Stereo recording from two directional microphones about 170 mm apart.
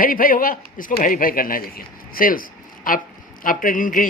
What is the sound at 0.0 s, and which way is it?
A man's voice, 55° left (ahead or behind).